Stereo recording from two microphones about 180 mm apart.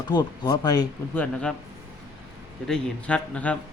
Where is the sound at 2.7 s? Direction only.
5° left (ahead or behind).